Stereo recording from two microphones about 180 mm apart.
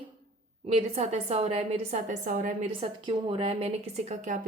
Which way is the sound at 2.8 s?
30° right (ahead or behind).